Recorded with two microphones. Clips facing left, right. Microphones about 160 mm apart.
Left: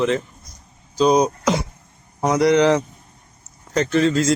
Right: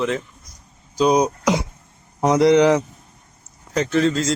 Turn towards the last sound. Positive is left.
turn(degrees=0)  # may be behind; listen again after turning